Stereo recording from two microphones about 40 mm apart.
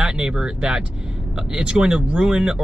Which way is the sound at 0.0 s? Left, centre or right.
Centre.